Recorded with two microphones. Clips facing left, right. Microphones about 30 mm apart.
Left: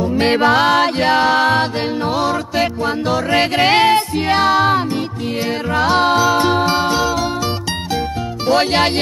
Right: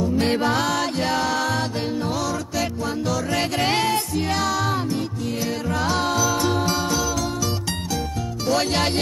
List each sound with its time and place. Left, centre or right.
0.0 s music: left
8.5 s music: left